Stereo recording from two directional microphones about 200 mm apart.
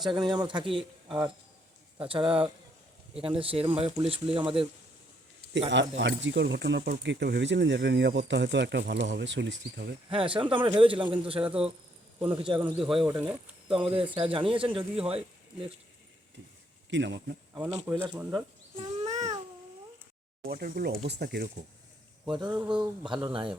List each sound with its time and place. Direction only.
0.1 s speech: 20° right (ahead or behind)
0.8 s speech: 5° right (ahead or behind)
2.0 s speech: 25° right (ahead or behind)
5.7 s speech: 65° right (ahead or behind)
10.1 s speech: 25° right (ahead or behind)
11.4 s speech: 5° right (ahead or behind)
13.0 s speech: 15° right (ahead or behind)
16.9 s speech: 65° right (ahead or behind)
17.9 s speech: 10° right (ahead or behind)
18.8 s a sound: 35° right (ahead or behind)
20.5 s speech: 50° right (ahead or behind)
22.3 s speech: 20° right (ahead or behind)
22.5 s speech: 5° right (ahead or behind)
23.0 s speech: 25° right (ahead or behind)